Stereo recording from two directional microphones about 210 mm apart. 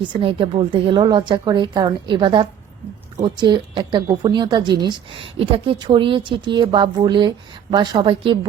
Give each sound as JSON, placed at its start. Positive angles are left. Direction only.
{"t": 0.0, "sound": "a woman's voice", "side_deg": -25}